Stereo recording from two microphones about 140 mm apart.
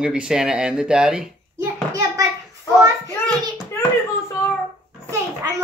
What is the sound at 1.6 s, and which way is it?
Hands, 20° right (ahead or behind).